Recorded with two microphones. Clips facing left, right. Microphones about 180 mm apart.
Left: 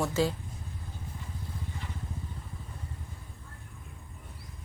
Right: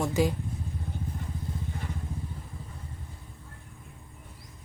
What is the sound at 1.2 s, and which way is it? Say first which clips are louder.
Vehicle: right 6 dB; 55° right (ahead or behind).